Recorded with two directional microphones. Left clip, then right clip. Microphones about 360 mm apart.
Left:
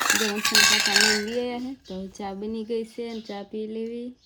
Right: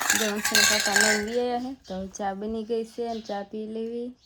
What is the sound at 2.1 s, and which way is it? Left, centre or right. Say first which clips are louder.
A woman's voice: right 3 dB; right.